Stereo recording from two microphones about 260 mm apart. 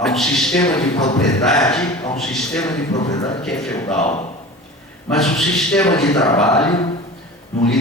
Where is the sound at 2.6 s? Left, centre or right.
Centre.